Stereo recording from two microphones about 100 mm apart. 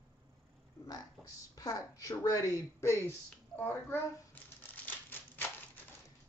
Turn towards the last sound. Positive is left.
turn(degrees=20)  # may be behind; listen again after turning